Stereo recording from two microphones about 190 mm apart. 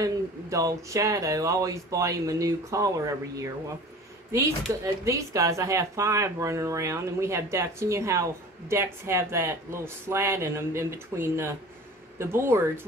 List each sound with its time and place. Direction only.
0.0 s a woman's voice: 15° right (ahead or behind)
5.0 s a woman's voice: 15° right (ahead or behind)